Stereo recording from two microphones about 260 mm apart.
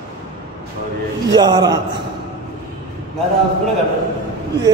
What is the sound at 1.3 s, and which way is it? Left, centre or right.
Speech, centre.